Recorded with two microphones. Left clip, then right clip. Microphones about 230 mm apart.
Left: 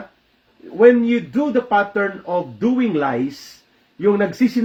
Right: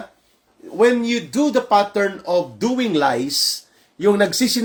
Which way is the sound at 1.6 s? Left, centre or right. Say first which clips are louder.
Right 1 dB; centre.